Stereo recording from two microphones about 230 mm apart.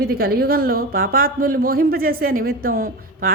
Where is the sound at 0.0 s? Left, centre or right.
Right.